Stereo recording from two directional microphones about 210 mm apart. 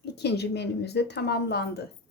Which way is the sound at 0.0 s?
50° left (ahead or behind).